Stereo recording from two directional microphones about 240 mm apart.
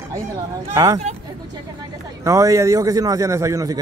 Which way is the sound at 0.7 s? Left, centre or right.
Centre.